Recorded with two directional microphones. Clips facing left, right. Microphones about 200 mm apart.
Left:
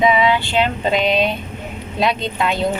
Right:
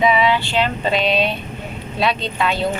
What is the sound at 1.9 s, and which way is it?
Speech, 15° left (ahead or behind).